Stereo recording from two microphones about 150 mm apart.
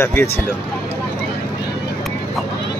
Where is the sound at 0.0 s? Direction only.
15° left (ahead or behind).